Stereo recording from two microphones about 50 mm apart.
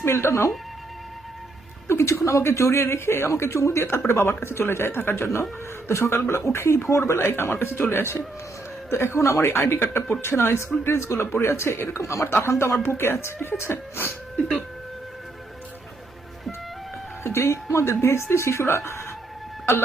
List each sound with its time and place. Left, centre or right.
0.0 s speech: left
1.9 s speech: left
17.2 s speech: left